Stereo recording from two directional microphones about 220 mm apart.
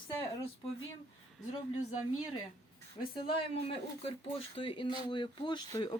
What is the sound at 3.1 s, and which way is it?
Speech, 25° left (ahead or behind).